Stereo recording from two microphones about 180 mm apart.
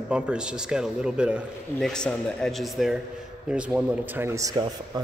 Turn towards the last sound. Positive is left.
turn(degrees=-20)  # may be behind; listen again after turning